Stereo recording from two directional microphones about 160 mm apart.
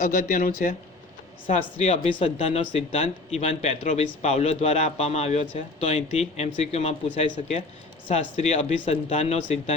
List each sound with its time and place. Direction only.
0.0 s a man's voice: 60° left (ahead or behind); by 9.7 s 45° left (ahead or behind)